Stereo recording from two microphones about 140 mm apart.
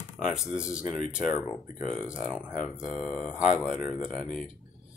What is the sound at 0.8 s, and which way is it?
Speech, 70° left (ahead or behind).